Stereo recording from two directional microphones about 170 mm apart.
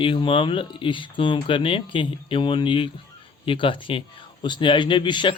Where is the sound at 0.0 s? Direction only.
30° left (ahead or behind).